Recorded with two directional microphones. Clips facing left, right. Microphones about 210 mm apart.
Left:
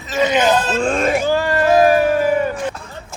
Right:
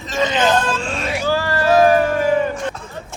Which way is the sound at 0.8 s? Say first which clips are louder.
Left 7 dB; 50° left (ahead or behind).